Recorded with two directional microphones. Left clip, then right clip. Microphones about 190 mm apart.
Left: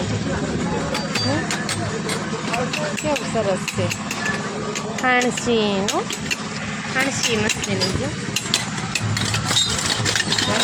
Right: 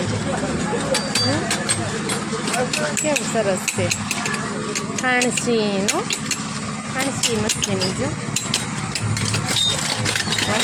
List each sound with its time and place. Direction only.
5.0 s speech: centre (ahead or behind)